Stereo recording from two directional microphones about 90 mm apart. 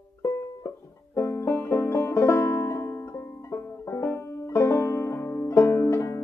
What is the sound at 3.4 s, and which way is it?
Banjo, 30° left (ahead or behind).